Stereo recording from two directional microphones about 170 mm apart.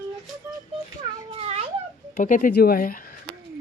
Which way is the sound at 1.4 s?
35° right (ahead or behind).